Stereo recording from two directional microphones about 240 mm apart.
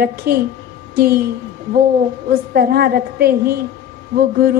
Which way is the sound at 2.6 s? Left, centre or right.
Right.